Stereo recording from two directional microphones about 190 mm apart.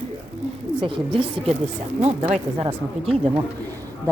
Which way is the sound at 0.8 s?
30° right (ahead or behind).